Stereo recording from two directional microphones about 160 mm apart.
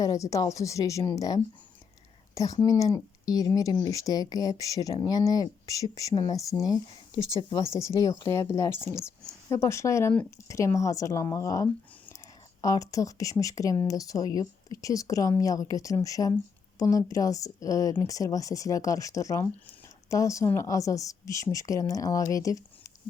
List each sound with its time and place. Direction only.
0.0 s speech: 20° left (ahead or behind)
7.9 s speech: 20° left (ahead or behind)